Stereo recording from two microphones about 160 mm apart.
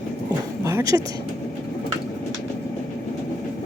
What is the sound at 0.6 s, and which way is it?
Dog, 15° right (ahead or behind).